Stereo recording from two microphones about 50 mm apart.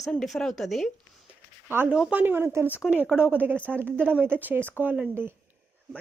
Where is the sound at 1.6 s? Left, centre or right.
Right.